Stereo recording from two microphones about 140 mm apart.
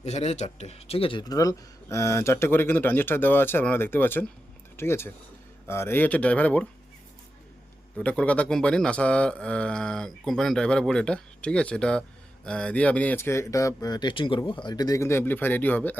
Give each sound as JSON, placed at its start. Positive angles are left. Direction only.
{"t": 0.0, "sound": "speech", "side_deg": 50}
{"t": 7.9, "sound": "speech", "side_deg": 10}